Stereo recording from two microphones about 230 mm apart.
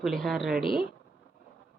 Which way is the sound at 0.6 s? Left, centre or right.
Left.